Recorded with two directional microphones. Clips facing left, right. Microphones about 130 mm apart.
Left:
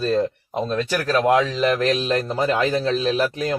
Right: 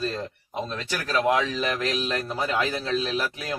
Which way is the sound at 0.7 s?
50° left (ahead or behind).